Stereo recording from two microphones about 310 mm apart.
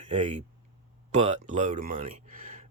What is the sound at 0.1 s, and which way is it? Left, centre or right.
Speech, right.